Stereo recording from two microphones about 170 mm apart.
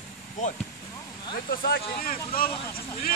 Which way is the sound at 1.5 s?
60° left (ahead or behind).